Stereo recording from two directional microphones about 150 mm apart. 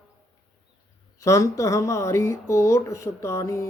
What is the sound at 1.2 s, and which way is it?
Speech, 20° left (ahead or behind).